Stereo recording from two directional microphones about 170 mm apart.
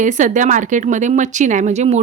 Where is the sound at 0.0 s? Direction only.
45° right (ahead or behind).